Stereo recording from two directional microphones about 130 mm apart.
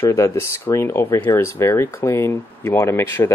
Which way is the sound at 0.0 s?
20° left (ahead or behind).